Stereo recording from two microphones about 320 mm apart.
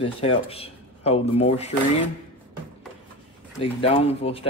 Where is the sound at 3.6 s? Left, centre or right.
Centre.